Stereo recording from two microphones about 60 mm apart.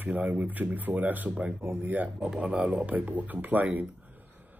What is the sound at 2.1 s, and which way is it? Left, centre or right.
Speech, centre.